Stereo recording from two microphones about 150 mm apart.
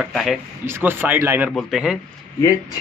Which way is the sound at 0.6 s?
15° right (ahead or behind).